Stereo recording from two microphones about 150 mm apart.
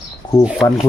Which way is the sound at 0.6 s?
20° left (ahead or behind).